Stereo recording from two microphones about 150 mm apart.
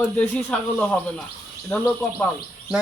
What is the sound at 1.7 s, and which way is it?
Speech, 5° left (ahead or behind).